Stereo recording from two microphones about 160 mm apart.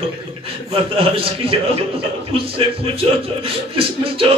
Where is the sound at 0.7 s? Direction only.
35° right (ahead or behind).